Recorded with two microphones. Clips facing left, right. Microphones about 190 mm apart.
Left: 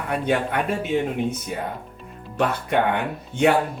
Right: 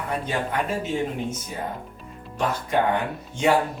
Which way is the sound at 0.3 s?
65° left (ahead or behind).